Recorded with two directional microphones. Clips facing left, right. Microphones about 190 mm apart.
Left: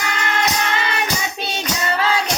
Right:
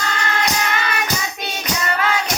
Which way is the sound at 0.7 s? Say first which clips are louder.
Left 1 dB; 25° left (ahead or behind).